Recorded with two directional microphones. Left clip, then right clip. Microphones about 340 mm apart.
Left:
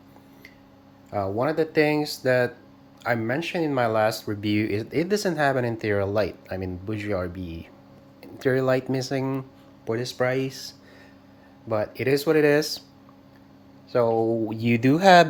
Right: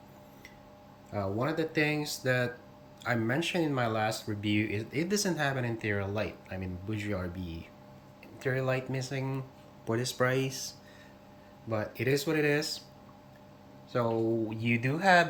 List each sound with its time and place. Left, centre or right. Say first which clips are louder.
1.1 s speech: left 8 dB; centre
13.9 s speech: left 9 dB; centre
14.5 s speech: left 9 dB; centre